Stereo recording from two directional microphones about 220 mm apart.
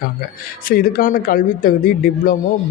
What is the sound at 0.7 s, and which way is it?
Speech, 40° left (ahead or behind).